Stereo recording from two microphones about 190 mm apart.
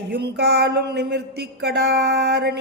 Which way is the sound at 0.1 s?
60° right (ahead or behind).